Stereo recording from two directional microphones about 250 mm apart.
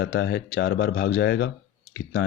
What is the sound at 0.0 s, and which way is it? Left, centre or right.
Speech, left.